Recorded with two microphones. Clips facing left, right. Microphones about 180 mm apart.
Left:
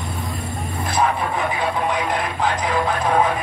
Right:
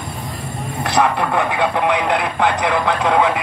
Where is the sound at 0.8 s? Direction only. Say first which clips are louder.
Right 4 dB; 70° right (ahead or behind).